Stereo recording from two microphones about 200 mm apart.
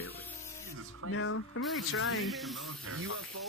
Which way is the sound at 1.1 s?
90° left.